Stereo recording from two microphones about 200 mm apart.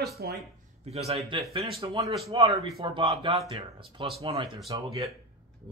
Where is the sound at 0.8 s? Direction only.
30° right (ahead or behind).